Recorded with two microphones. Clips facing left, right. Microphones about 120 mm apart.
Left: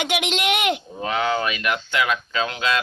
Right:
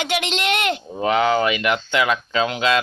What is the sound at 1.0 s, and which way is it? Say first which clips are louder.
Speech: right 5 dB; 30° right (ahead or behind).